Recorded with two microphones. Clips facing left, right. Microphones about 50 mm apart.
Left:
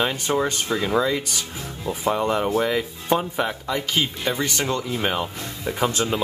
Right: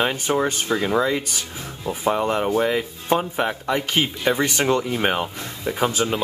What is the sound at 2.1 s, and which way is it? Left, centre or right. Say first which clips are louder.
Speech: right 1 dB; centre.